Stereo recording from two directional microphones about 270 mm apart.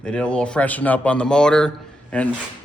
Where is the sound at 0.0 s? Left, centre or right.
Centre.